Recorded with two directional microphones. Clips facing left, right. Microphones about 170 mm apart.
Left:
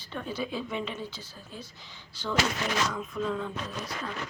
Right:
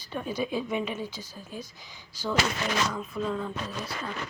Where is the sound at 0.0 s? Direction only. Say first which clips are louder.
Right 3 dB; 10° right (ahead or behind).